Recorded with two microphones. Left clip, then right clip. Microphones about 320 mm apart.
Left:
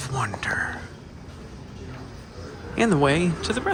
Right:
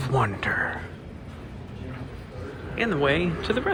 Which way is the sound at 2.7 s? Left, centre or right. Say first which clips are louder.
Left 3 dB; left.